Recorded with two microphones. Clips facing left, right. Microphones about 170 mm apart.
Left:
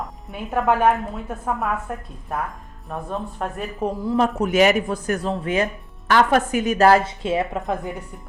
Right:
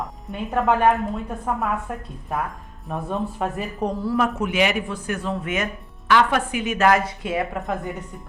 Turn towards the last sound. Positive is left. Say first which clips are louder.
# left 2 dB
turn(degrees=25)  # may be behind; listen again after turning